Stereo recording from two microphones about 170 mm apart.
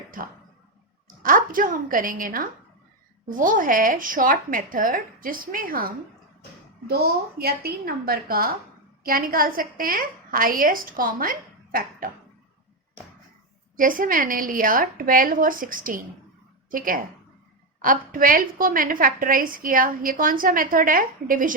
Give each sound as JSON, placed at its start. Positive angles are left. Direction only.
{"t": 0.2, "sound": "a woman's voice", "side_deg": -55}
{"t": 13.7, "sound": "a woman's voice", "side_deg": -55}